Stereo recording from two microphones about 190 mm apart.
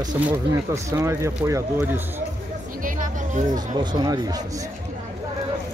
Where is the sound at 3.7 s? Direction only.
20° right (ahead or behind).